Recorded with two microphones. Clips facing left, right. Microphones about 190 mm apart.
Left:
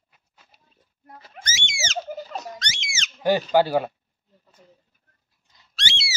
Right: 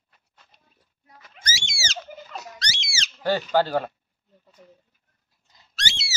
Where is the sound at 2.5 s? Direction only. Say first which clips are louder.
Even; 35° right (ahead or behind).